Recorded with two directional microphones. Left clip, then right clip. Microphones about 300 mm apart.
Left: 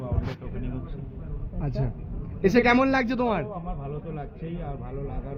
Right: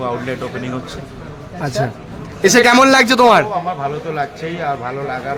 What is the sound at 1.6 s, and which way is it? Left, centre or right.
A man's voice, centre.